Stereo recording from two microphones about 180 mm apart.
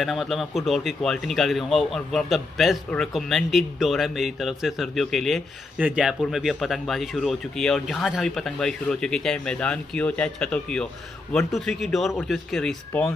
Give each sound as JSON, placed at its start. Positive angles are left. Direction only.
{"t": 0.0, "sound": "a man's voice", "side_deg": 0}